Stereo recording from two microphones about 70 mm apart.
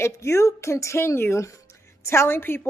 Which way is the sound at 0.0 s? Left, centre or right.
Left.